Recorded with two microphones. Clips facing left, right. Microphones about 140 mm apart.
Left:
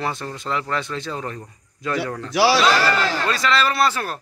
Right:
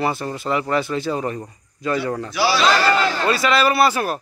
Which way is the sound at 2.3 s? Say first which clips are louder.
Left 4 dB; 80° left.